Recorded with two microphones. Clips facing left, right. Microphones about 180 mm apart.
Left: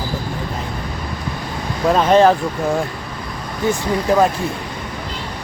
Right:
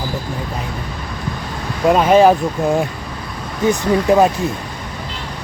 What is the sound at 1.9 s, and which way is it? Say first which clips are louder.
Speech: right 2 dB; 10° right (ahead or behind).